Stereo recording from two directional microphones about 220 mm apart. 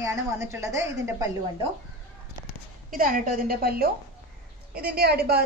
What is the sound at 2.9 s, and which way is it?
A woman's voice, 40° right (ahead or behind).